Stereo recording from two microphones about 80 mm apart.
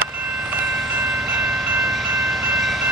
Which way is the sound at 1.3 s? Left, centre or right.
Centre.